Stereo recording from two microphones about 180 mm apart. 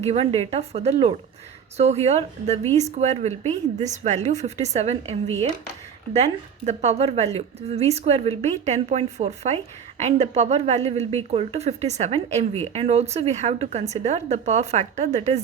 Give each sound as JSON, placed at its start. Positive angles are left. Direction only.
{"t": 0.0, "sound": "speech", "side_deg": -35}
{"t": 6.7, "sound": "speech", "side_deg": -35}